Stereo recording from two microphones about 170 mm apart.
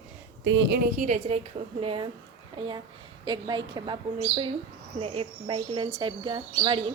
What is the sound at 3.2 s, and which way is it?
Speech, 25° right (ahead or behind).